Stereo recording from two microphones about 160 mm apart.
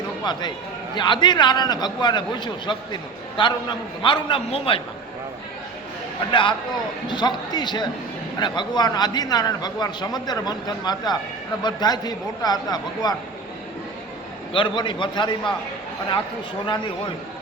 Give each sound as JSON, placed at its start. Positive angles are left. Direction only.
{"t": 0.3, "sound": "a man's voice", "side_deg": 25}
{"t": 6.3, "sound": "a man's voice", "side_deg": 30}
{"t": 14.5, "sound": "a man's voice", "side_deg": 30}